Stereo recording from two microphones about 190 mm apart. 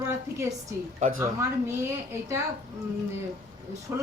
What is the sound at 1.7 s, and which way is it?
Speech, 15° right (ahead or behind).